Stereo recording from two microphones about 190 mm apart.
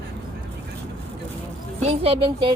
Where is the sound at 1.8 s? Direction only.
30° right (ahead or behind).